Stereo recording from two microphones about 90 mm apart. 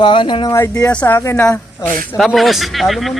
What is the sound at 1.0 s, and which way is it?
Speech, 30° left (ahead or behind).